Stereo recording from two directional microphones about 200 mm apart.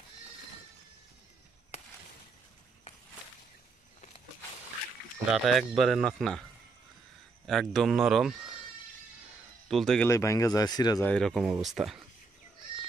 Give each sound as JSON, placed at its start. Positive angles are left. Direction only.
{"t": 5.3, "sound": "speech", "side_deg": 0}
{"t": 7.4, "sound": "speech", "side_deg": 0}
{"t": 9.7, "sound": "speech", "side_deg": 0}
{"t": 10.0, "sound": "speech", "side_deg": 15}
{"t": 11.1, "sound": "speech", "side_deg": 5}